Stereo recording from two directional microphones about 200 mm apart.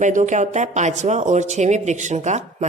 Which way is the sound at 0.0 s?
40° right (ahead or behind).